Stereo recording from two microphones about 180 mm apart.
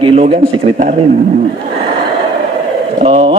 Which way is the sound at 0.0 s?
30° right (ahead or behind).